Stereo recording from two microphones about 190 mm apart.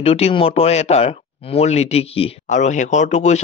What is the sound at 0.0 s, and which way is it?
Speech, 30° left (ahead or behind).